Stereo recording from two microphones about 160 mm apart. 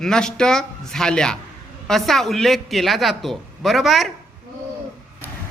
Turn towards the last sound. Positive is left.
turn(degrees=0)  # may be behind; listen again after turning